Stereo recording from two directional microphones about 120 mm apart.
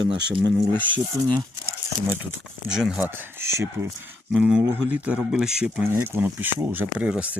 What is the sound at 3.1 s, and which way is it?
Speech, 20° right (ahead or behind).